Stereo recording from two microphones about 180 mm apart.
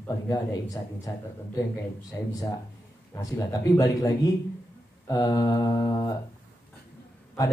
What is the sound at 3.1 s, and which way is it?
Speech, 20° left (ahead or behind).